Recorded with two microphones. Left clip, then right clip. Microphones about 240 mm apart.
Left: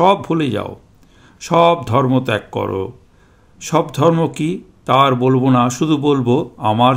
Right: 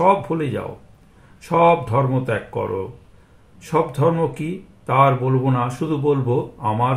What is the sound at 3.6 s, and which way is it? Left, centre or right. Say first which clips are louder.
Speech: left 4 dB; left.